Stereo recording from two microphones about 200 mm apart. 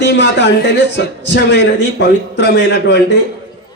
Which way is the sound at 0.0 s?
60° left (ahead or behind).